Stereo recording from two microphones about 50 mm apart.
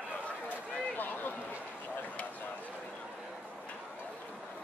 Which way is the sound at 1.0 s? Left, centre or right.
Left.